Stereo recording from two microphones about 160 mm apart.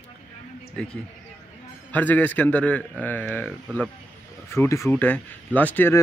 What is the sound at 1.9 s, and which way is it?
A man's voice, 10° left (ahead or behind).